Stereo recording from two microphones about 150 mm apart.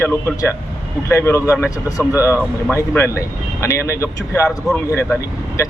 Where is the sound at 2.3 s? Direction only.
15° left (ahead or behind).